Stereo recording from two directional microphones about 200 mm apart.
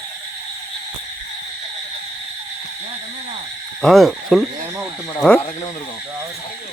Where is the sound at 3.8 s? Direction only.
Centre (ahead or behind).